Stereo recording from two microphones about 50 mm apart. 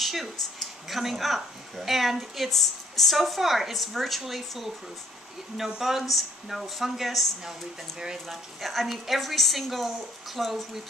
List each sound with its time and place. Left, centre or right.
0.0 s speech: centre